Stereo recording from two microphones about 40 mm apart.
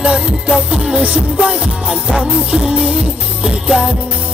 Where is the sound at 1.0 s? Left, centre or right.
Right.